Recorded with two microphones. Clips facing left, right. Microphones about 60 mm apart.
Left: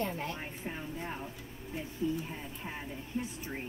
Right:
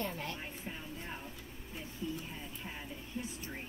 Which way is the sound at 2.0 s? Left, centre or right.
Left.